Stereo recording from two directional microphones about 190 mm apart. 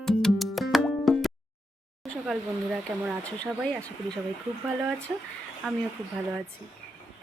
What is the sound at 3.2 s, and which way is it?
Speech, 5° left (ahead or behind).